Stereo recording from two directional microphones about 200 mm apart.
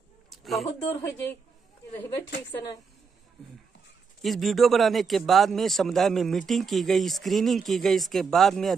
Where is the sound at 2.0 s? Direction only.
20° left (ahead or behind).